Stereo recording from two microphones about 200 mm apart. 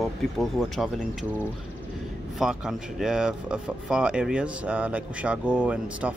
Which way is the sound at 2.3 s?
Centre (ahead or behind).